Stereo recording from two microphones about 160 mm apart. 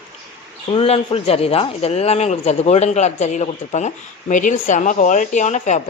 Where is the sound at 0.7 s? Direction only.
40° left (ahead or behind).